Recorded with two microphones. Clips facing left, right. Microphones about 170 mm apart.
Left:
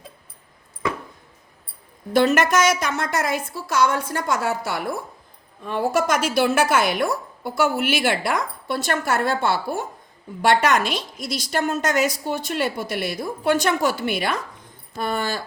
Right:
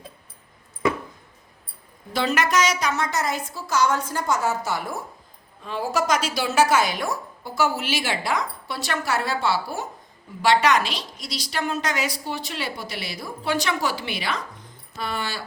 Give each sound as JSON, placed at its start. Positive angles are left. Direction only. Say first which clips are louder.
{"t": 2.1, "sound": "a woman's voice", "louder": "left 5 dB", "side_deg": 50}